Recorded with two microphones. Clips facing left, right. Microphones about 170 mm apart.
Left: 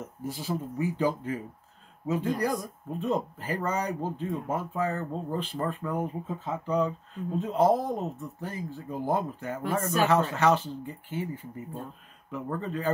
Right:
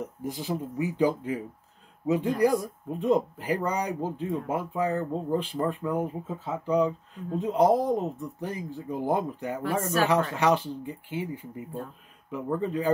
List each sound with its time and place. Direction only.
0.0 s speech: 15° right (ahead or behind)